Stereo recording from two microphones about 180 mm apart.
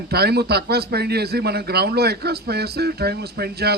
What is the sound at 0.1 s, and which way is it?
A man's voice, 65° right (ahead or behind).